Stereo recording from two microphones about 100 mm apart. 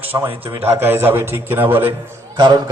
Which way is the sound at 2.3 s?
45° right (ahead or behind).